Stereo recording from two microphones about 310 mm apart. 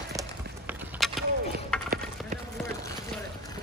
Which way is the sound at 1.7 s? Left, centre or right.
Centre.